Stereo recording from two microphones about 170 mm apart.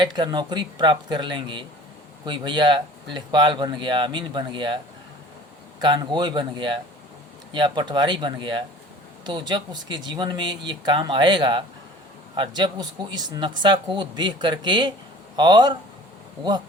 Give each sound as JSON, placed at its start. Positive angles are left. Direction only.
{"t": 0.0, "sound": "speech", "side_deg": -25}
{"t": 5.8, "sound": "speech", "side_deg": -25}